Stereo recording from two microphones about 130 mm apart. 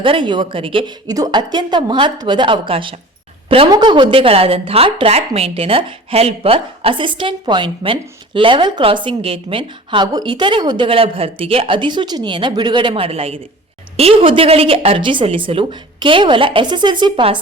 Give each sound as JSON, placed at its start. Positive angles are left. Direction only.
{"t": 0.0, "sound": "a woman's voice", "side_deg": -40}
{"t": 1.0, "sound": "a woman's voice", "side_deg": -30}
{"t": 10.8, "sound": "a woman's voice", "side_deg": -45}